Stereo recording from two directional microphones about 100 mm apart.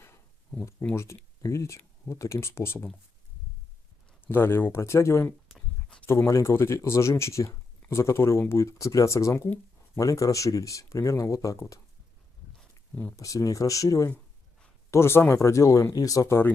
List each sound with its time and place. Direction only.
0.6 s speech: 25° left (ahead or behind)
4.2 s speech: 20° left (ahead or behind)
5.5 s a sound: 10° left (ahead or behind)
6.0 s speech: 25° left (ahead or behind)
13.1 s speech: 35° left (ahead or behind)